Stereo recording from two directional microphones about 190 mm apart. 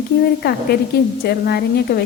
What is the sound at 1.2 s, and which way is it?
Speech, 55° left (ahead or behind).